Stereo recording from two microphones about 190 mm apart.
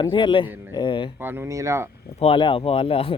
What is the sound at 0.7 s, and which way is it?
Speech, 25° left (ahead or behind).